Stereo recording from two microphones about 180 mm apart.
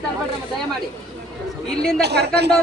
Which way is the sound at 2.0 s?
65° right (ahead or behind).